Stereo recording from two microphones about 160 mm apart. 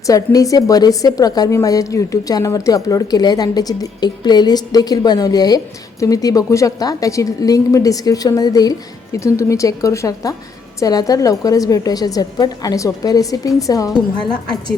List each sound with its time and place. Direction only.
0.1 s a woman's voice: 20° left (ahead or behind)